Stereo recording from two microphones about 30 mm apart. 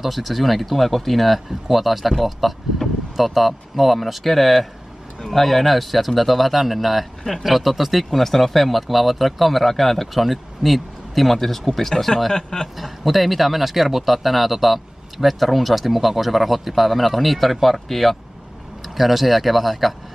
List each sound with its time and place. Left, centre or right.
0.0 s speech: centre
12.4 s speech: left
12.7 s speech: centre